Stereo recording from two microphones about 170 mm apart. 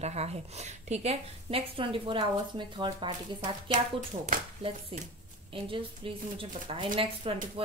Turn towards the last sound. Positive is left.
turn(degrees=-35)  # may be behind; listen again after turning